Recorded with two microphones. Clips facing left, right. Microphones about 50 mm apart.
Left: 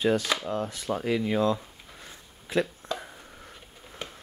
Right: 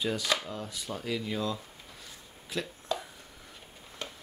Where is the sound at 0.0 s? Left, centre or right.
Left.